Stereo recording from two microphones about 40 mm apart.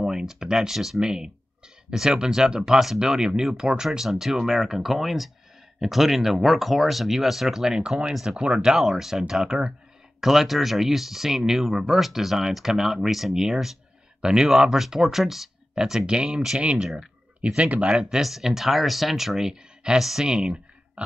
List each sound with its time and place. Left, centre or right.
0.0 s speech: centre
8.7 s speech: centre
9.5 s speech: right
10.2 s speech: centre; by 16.8 s right
16.8 s speech: centre
17.6 s speech: right
18.2 s speech: centre
19.5 s speech: centre
20.0 s speech: centre
20.2 s a sound: right